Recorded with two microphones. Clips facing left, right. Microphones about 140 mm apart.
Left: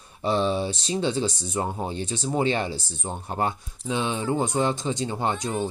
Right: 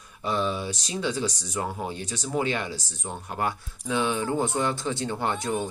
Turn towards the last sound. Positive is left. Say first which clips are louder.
# left 2 dB
turn(degrees=20)  # may be behind; listen again after turning